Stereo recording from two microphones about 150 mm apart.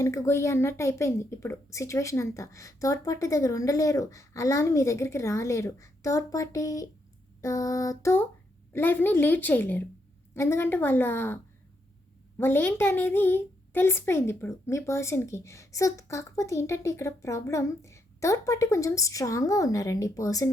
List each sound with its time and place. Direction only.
0.0 s a woman's voice: 20° left (ahead or behind)
12.4 s a woman's voice: 15° left (ahead or behind)